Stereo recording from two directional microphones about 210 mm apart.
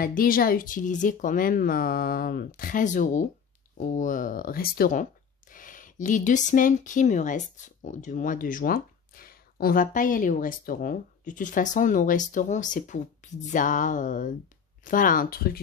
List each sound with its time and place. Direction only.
0.0 s speech: 45° left (ahead or behind)